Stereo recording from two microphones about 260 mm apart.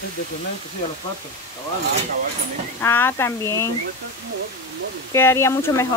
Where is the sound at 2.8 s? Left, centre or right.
Centre.